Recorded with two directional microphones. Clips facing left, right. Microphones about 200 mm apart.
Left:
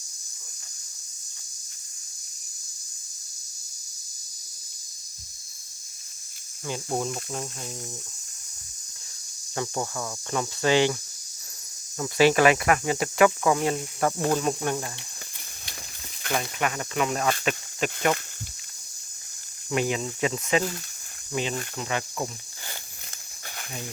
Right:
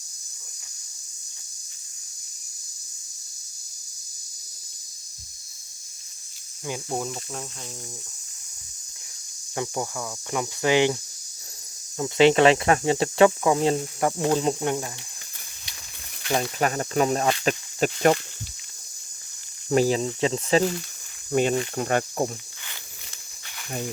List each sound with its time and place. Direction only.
6.7 s speech: 5° right (ahead or behind)
9.6 s cricket: 10° right (ahead or behind)
11.9 s speech: 20° right (ahead or behind)
16.3 s speech: 35° right (ahead or behind)
19.7 s speech: 35° right (ahead or behind)
21.3 s speech: 50° right (ahead or behind)